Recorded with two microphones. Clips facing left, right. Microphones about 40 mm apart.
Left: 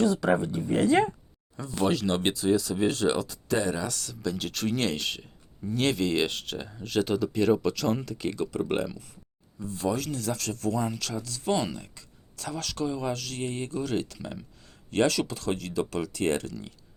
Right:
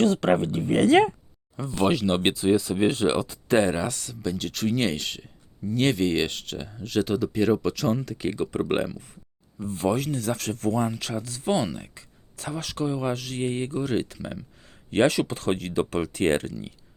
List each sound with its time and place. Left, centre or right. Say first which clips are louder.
0.0 s speech: right 3 dB; right
1.5 s speech: right 3 dB; right
3.5 s speech: right 6 dB; right
3.8 s speech: right 2 dB; centre
8.0 s speech: right 3 dB; centre
8.4 s speech: right 3 dB; right
10.8 s speech: right 3 dB; right
11.5 s speech: right 3 dB; centre
11.8 s a sound: right 3 dB; right
12.6 s speech: right 3 dB; centre
14.6 s a sound: right 4 dB; right
15.3 s speech: right 4 dB; right